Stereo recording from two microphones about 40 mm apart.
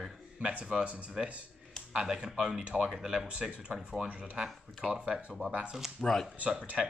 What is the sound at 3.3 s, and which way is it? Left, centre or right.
Speech, right.